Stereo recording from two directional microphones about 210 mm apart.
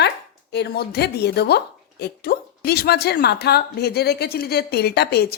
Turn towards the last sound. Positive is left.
turn(degrees=50)  # may be behind; listen again after turning